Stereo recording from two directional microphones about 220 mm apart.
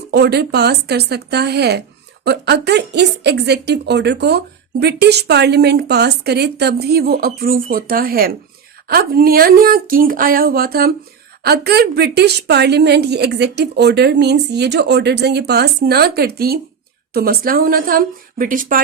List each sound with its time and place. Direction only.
0.1 s a woman's voice: 50° right (ahead or behind)